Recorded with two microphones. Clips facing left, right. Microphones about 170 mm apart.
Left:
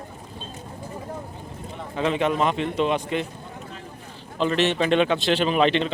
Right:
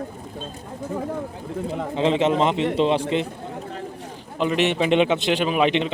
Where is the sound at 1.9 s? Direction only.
25° right (ahead or behind).